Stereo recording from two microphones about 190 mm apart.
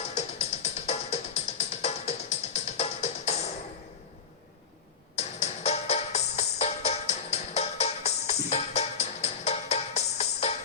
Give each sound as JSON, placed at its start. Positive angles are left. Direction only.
{"t": 0.1, "sound": "music", "side_deg": 35}
{"t": 5.1, "sound": "music", "side_deg": 35}